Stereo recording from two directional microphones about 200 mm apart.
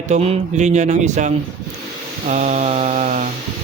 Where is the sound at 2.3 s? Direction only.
35° right (ahead or behind).